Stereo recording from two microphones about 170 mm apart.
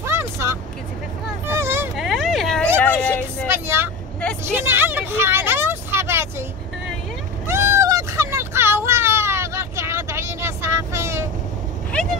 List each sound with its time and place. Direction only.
0.0 s vehicle: 15° right (ahead or behind)
2.0 s vehicle: centre (ahead or behind)
2.8 s a sound: 5° left (ahead or behind)
3.4 s vehicle: 15° right (ahead or behind)
7.4 s a sound: 15° right (ahead or behind)
11.9 s vehicle: 5° left (ahead or behind)